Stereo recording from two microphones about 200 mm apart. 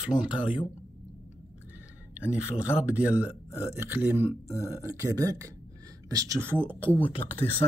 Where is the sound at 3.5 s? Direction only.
15° left (ahead or behind).